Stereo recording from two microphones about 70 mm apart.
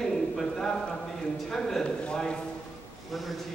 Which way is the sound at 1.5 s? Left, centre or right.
Centre.